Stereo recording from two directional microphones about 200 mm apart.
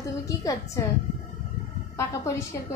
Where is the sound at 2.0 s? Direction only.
15° left (ahead or behind).